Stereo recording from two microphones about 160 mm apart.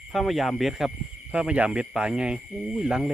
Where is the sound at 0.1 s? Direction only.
Centre (ahead or behind).